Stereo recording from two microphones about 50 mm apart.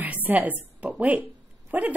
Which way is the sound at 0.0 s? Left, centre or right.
Right.